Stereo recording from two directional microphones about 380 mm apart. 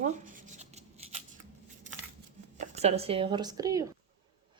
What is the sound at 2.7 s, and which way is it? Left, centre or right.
Speech, centre.